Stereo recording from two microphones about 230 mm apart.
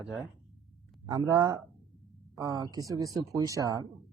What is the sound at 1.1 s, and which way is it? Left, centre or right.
Speech, centre.